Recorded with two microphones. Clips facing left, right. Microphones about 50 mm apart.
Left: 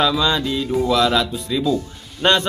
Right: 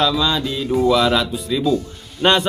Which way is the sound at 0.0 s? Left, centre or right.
Centre.